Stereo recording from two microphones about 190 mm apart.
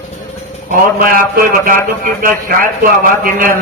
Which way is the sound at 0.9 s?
50° right (ahead or behind).